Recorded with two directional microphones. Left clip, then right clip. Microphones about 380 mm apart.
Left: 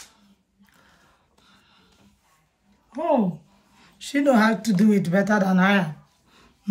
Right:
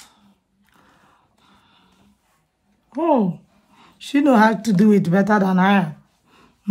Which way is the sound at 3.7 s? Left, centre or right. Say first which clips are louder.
Right 4 dB; centre.